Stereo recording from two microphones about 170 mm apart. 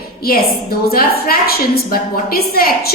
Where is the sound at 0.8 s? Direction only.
60° left (ahead or behind).